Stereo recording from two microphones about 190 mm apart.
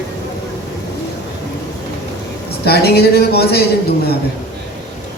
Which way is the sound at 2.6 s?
60° left (ahead or behind).